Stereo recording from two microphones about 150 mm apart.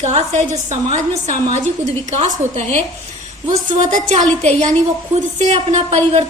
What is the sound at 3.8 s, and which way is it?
A woman's voice, 55° right (ahead or behind).